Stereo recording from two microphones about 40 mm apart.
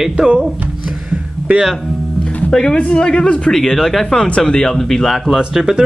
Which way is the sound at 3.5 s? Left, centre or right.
Centre.